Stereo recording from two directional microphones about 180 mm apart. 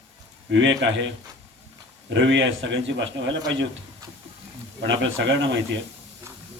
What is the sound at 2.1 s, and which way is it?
Speech, 90° right.